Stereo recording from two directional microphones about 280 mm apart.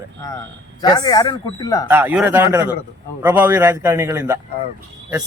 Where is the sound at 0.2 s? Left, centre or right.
Centre.